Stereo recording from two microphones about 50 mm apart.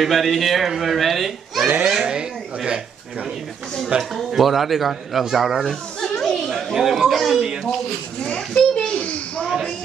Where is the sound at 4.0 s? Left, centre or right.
Centre.